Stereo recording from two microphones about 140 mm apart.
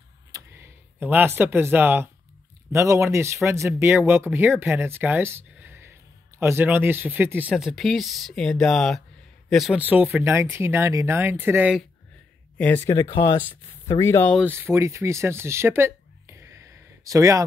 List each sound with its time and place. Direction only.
0.3 s a sound: 20° right (ahead or behind)
2.7 s speech: 20° right (ahead or behind)
7.5 s speech: centre (ahead or behind)
9.8 s speech: 10° right (ahead or behind)
12.5 s speech: 15° left (ahead or behind)
14.4 s speech: 15° right (ahead or behind)